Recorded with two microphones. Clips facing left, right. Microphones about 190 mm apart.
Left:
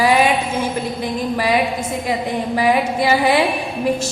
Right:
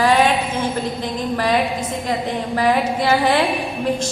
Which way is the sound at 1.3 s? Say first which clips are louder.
Even; 10° left (ahead or behind).